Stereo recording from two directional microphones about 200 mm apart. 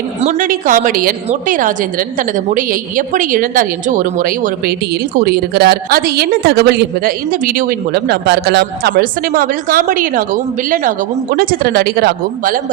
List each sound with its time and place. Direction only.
0.2 s a woman's voice: 40° right (ahead or behind)